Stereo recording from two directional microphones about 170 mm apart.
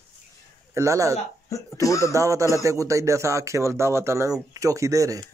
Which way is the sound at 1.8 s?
20° left (ahead or behind).